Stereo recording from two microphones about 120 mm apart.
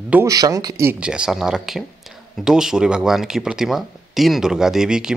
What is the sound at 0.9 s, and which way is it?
Speech, 10° right (ahead or behind).